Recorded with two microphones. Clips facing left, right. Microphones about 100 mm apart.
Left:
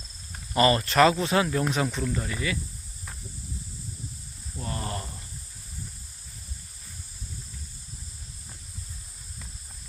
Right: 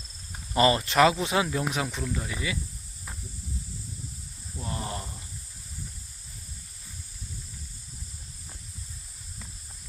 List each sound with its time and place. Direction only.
0.3 s cricket: 20° right (ahead or behind)
0.8 s speech: 10° right (ahead or behind)
4.6 s snake: 15° right (ahead or behind)